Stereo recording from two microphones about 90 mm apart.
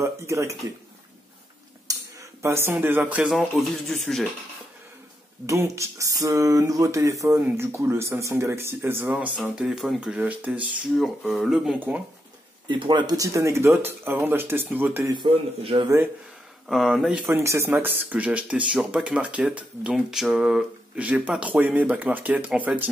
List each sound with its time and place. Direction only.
0.0 s a sound: 35° right (ahead or behind)
1.9 s a sound: 35° right (ahead or behind)
3.3 s speech: centre (ahead or behind)
5.5 s a sound: 35° right (ahead or behind)
7.4 s speech: 25° right (ahead or behind)
9.0 s speech: 15° right (ahead or behind)
9.6 s speech: 5° right (ahead or behind)
11.0 s speech: centre (ahead or behind)
12.6 s a man's voice: 60° right (ahead or behind)
13.1 s speech: 35° right (ahead or behind); by 15.0 s 20° right (ahead or behind)
15.1 s a man's voice: 65° right (ahead or behind)
16.6 s speech: 5° right (ahead or behind)
17.3 s speech: 30° right (ahead or behind); by 22.8 s 15° right (ahead or behind)